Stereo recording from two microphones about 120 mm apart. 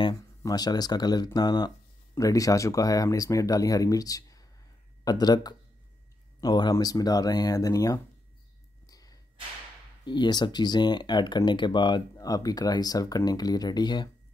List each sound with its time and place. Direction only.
0.0 s speech: 35° left (ahead or behind)
8.8 s a sound: 30° left (ahead or behind)
10.0 s speech: 40° left (ahead or behind)